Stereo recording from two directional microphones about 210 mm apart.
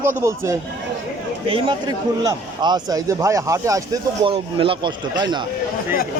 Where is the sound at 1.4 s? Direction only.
25° right (ahead or behind).